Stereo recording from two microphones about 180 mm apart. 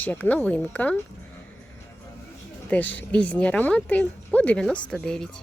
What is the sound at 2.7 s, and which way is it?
A woman's voice, 10° left (ahead or behind).